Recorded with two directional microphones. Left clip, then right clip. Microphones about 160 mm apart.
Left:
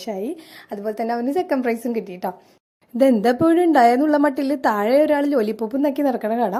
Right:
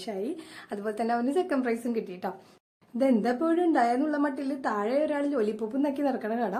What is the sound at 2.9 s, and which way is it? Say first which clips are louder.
A woman's voice: left 9 dB; 50° left (ahead or behind).